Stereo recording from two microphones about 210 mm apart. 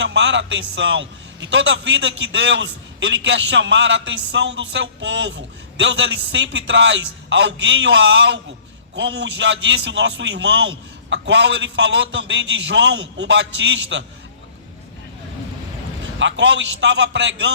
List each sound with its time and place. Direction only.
0.0 s a man's voice: 60° right (ahead or behind)
16.1 s a man's voice: 60° right (ahead or behind)